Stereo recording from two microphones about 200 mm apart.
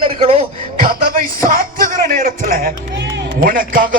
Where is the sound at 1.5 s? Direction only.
45° right (ahead or behind).